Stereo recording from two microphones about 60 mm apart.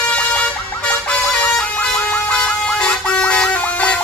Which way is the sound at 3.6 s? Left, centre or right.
Left.